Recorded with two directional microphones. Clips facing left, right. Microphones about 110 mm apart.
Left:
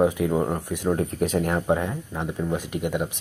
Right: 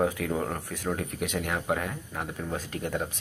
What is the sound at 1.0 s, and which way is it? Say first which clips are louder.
Speech: left 8 dB; 35° left (ahead or behind).